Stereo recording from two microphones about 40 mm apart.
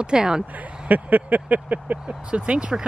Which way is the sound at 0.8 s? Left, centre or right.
Right.